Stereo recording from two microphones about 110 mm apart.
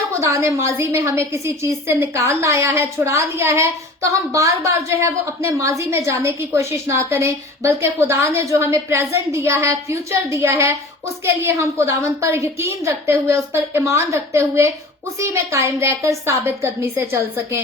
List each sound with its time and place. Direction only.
0.2 s a woman's voice: 25° right (ahead or behind)